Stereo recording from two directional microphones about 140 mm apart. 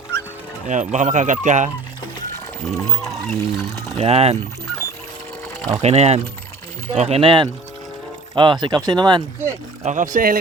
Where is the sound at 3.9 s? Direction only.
50° right (ahead or behind).